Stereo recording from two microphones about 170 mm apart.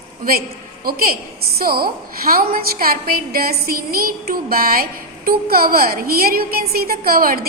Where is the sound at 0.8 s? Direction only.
60° right (ahead or behind).